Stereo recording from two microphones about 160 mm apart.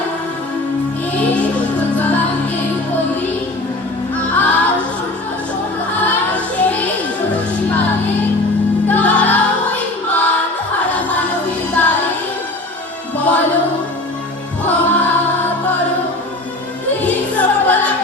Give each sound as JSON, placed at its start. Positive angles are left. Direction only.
{"t": 1.1, "sound": "music", "side_deg": 10}
{"t": 4.1, "sound": "music", "side_deg": 10}
{"t": 6.1, "sound": "music", "side_deg": 10}
{"t": 8.9, "sound": "music", "side_deg": 10}
{"t": 11.7, "sound": "music", "side_deg": 10}
{"t": 13.1, "sound": "music", "side_deg": 10}
{"t": 14.6, "sound": "music", "side_deg": 10}
{"t": 17.0, "sound": "music", "side_deg": 10}